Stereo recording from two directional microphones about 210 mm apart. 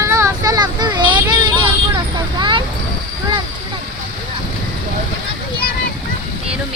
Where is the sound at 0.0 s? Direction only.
15° right (ahead or behind).